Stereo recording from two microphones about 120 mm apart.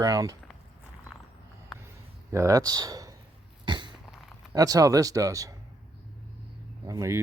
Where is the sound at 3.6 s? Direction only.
40° right (ahead or behind).